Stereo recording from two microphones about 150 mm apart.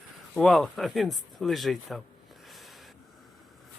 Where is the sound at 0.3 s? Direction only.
Centre (ahead or behind).